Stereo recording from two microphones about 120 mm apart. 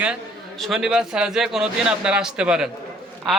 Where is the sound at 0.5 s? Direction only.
Centre (ahead or behind).